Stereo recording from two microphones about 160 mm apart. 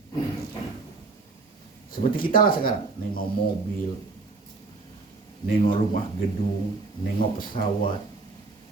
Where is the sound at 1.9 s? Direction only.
65° left (ahead or behind).